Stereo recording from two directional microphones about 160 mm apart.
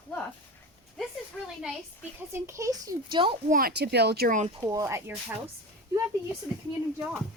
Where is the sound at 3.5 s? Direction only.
70° right (ahead or behind).